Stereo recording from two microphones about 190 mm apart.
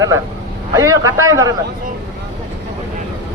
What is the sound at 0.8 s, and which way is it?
Speech, 15° right (ahead or behind).